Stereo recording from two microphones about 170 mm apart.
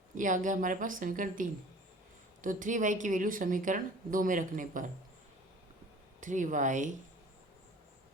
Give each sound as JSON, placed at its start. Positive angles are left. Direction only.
{"t": 0.2, "sound": "speech", "side_deg": -50}
{"t": 6.1, "sound": "speech", "side_deg": -50}